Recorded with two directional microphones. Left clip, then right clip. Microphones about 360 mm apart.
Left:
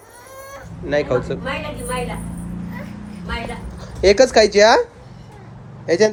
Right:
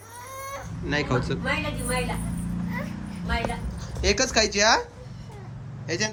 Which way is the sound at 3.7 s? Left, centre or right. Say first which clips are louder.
Left 13 dB; centre.